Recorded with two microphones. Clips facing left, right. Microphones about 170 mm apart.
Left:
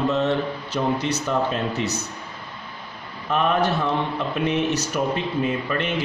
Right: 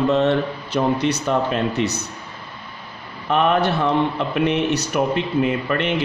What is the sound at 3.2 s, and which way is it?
A man's voice, 70° right (ahead or behind).